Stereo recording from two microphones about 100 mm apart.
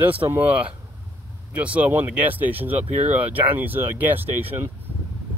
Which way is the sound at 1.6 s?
15° right (ahead or behind).